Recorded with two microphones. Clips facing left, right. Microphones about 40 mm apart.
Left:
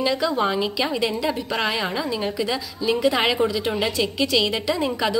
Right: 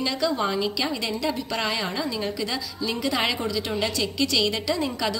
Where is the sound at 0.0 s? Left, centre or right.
Centre.